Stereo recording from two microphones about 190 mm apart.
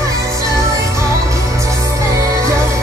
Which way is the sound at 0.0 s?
15° right (ahead or behind).